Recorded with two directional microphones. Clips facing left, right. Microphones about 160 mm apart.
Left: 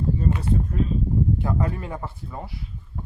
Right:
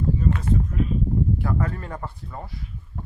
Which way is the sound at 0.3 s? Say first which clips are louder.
Even; 30° left (ahead or behind).